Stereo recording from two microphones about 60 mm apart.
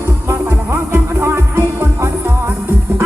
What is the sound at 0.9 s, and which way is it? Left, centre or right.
Music, right.